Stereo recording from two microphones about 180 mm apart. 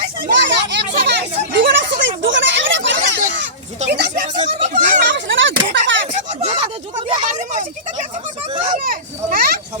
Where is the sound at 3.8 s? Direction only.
65° right (ahead or behind).